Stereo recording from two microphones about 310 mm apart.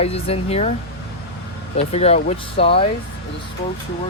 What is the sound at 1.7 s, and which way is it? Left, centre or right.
Speech, centre.